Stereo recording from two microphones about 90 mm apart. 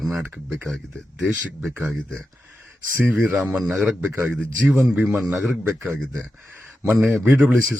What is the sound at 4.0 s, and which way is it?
Speech, 20° right (ahead or behind).